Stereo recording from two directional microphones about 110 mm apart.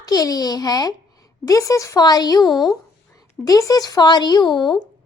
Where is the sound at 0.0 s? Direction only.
35° left (ahead or behind).